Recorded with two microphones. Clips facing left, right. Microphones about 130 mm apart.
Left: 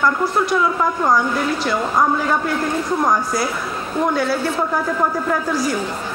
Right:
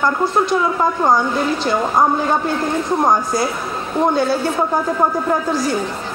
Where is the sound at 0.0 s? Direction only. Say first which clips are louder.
Right 1 dB; 25° right (ahead or behind).